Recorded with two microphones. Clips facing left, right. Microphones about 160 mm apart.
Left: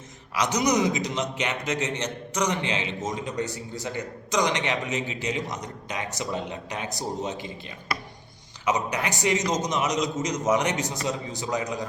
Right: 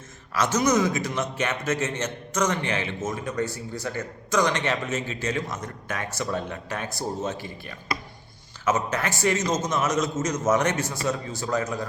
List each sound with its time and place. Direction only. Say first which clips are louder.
0.3 s a man's voice: right 1 dB; 15° left (ahead or behind)